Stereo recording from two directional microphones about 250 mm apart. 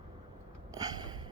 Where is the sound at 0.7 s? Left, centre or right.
Centre.